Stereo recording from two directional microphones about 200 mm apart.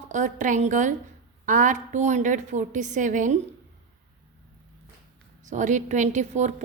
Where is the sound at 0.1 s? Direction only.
40° right (ahead or behind).